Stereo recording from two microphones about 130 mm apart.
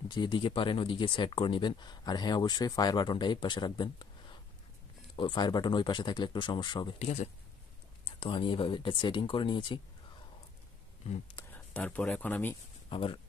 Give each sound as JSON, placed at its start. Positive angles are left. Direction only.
{"t": 0.1, "sound": "speech", "side_deg": 35}
{"t": 7.0, "sound": "speech", "side_deg": 60}
{"t": 8.0, "sound": "speech", "side_deg": 45}
{"t": 11.5, "sound": "speech", "side_deg": 10}
{"t": 12.9, "sound": "speech", "side_deg": 45}